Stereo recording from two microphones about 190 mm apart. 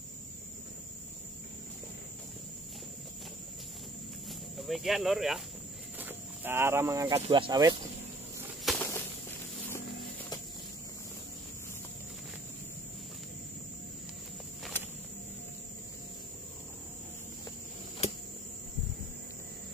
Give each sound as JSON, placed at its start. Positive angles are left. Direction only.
{"t": 4.3, "sound": "speech", "side_deg": 0}
{"t": 5.9, "sound": "cricket", "side_deg": -10}
{"t": 7.2, "sound": "speech", "side_deg": -25}
{"t": 8.6, "sound": "a sound", "side_deg": 10}